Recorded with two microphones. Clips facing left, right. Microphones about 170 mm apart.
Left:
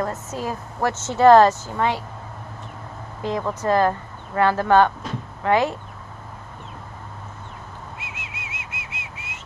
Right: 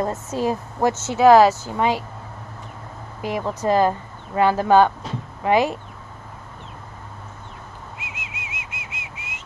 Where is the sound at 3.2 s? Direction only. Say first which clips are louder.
Even; 10° right (ahead or behind).